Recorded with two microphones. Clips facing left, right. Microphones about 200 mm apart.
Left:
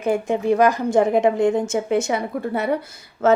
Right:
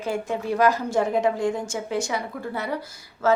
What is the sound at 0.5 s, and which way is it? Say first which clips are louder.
Speech: left 3 dB; 15° left (ahead or behind).